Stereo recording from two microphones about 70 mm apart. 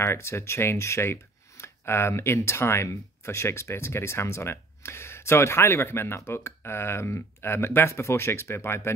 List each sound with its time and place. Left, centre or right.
0.0 s speech: left